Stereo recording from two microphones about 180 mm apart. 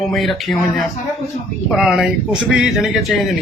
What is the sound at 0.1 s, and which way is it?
A man's voice, centre (ahead or behind).